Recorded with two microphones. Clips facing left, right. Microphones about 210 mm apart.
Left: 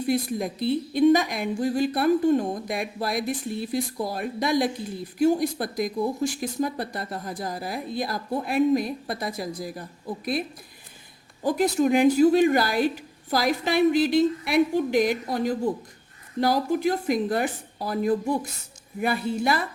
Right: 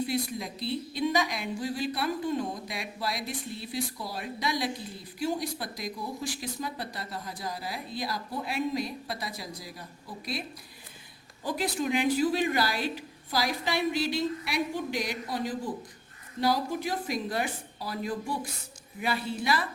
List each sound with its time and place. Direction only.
0.0 s speech: 50° left (ahead or behind)
11.4 s speech: 45° left (ahead or behind)